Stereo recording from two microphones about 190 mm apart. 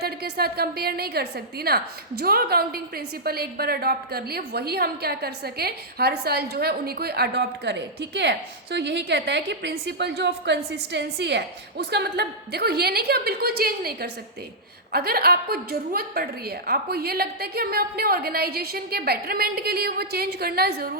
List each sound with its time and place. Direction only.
0.0 s a woman's voice: 55° right (ahead or behind)